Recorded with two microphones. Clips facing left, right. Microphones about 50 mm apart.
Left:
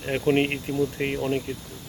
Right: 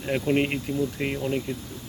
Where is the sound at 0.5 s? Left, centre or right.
Centre.